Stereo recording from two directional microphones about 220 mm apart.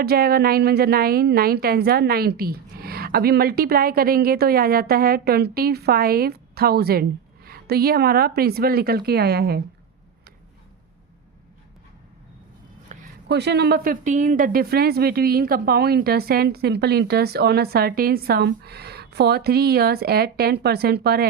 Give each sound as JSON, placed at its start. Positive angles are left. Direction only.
{"t": 0.0, "sound": "a woman's voice", "side_deg": -45}
{"t": 12.9, "sound": "a sound", "side_deg": -35}
{"t": 13.2, "sound": "a woman's voice", "side_deg": -50}